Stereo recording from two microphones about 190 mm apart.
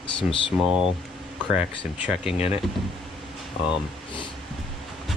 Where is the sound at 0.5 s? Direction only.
5° right (ahead or behind).